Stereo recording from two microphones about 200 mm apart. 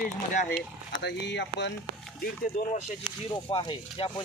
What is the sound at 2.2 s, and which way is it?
Speech, 45° left (ahead or behind).